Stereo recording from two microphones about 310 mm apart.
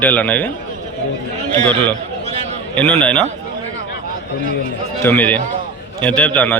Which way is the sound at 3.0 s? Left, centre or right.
Centre.